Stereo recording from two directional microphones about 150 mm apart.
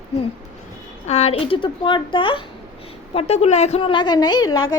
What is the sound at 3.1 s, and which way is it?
A woman's voice, 45° left (ahead or behind).